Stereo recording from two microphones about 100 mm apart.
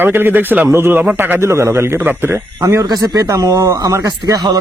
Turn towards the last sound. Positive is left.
turn(degrees=-35)  # may be behind; listen again after turning